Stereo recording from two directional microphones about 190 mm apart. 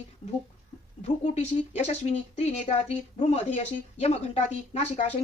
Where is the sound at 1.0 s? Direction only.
35° left (ahead or behind).